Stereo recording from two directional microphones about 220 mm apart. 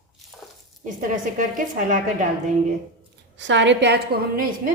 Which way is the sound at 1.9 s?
35° right (ahead or behind).